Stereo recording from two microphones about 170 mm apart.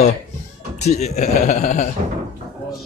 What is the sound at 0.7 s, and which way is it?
A man's voice, 40° left (ahead or behind).